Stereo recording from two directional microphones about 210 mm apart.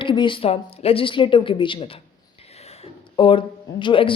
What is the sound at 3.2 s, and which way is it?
Speech, 25° left (ahead or behind).